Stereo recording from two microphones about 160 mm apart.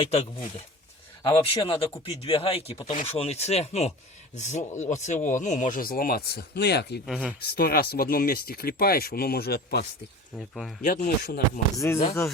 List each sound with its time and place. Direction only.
0.0 s speech: 40° left (ahead or behind); by 7.0 s 90° left
7.1 s speech: 5° right (ahead or behind)
7.5 s speech: 70° left (ahead or behind)
10.3 s speech: centre (ahead or behind)
10.8 s speech: 55° left (ahead or behind)
11.2 s speech: 70° left (ahead or behind)
11.8 s speech: 15° left (ahead or behind)